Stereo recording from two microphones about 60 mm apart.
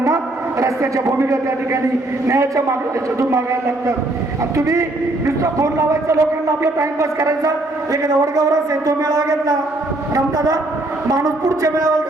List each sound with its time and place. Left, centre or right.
0.6 s a man's voice: right
8.0 s a man's voice: right